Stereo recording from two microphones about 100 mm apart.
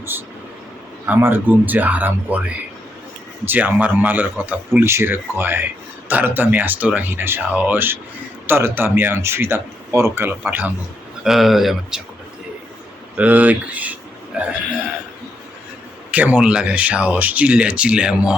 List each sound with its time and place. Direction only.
1.0 s speech: 20° right (ahead or behind)
3.4 s speech: 20° right (ahead or behind)
11.2 s speech: 5° right (ahead or behind)
13.1 s speech: 15° right (ahead or behind)
16.1 s speech: 15° right (ahead or behind)